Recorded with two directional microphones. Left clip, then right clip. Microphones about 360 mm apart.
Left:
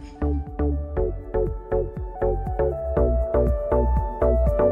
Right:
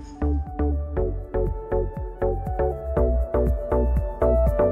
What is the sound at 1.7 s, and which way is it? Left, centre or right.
Music, centre.